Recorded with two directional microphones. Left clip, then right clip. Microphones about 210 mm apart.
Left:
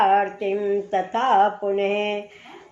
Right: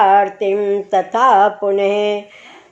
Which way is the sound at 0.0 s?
35° right (ahead or behind).